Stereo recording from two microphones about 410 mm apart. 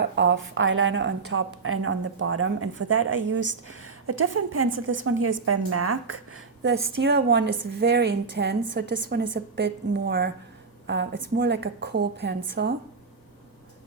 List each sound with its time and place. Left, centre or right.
0.2 s a woman's voice: right